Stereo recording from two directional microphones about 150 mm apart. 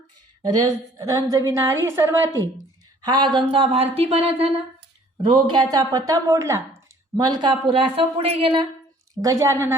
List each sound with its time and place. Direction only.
0.4 s a woman's voice: 25° right (ahead or behind); by 4.5 s 40° right (ahead or behind)
5.1 s a woman's voice: 30° right (ahead or behind)
9.1 s a woman's voice: 20° right (ahead or behind)